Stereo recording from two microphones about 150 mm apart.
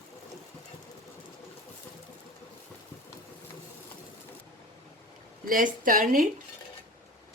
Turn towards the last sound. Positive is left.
turn(degrees=-65)  # may be behind; listen again after turning